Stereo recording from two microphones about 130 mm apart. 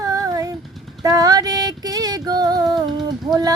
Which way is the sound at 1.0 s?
25° right (ahead or behind).